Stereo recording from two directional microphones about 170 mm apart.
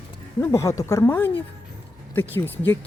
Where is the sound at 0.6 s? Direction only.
15° left (ahead or behind).